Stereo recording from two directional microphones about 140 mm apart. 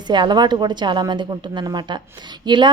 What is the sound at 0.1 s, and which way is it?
A woman's voice, 30° right (ahead or behind).